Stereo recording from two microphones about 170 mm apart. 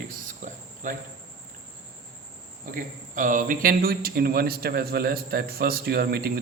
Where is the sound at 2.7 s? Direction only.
50° right (ahead or behind).